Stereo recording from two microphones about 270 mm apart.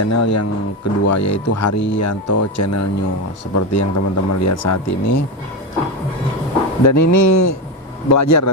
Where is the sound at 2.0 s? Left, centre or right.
Left.